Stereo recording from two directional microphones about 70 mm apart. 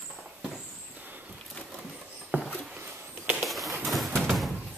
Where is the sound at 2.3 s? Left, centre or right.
Right.